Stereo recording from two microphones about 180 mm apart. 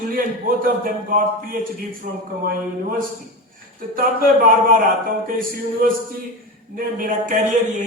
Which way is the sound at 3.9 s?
50° right (ahead or behind).